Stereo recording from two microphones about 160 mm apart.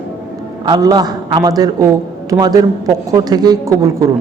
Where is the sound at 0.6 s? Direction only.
25° right (ahead or behind).